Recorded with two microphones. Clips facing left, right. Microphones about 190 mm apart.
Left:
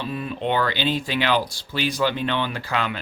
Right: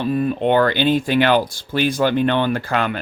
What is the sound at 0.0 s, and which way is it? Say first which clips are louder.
Speech: right 8 dB; 50° right (ahead or behind).